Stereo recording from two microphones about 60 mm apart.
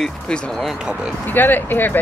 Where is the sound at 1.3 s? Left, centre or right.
Left.